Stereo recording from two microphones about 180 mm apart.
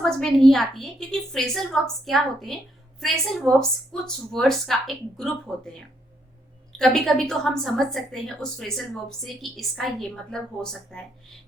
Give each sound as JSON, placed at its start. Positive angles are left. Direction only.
{"t": 0.0, "sound": "a woman's voice", "side_deg": 5}
{"t": 6.7, "sound": "a woman's voice", "side_deg": 5}